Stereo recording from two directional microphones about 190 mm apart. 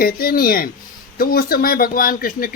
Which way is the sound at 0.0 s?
50° left (ahead or behind).